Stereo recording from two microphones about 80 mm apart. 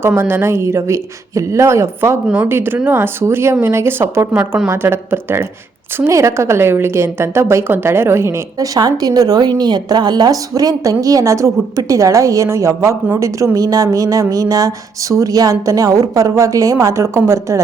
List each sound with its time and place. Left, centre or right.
0.2 s a woman's voice: right
2.2 s a woman's voice: centre
2.5 s a woman's voice: right
4.3 s a woman's voice: centre
4.7 s a woman's voice: right